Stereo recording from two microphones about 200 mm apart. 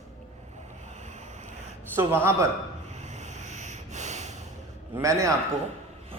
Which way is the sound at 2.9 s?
35° right (ahead or behind).